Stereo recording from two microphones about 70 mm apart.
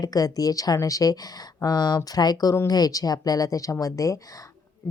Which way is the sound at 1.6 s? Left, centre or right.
Left.